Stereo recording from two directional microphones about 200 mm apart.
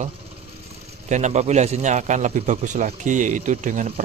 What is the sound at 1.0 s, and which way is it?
Speech, 35° right (ahead or behind).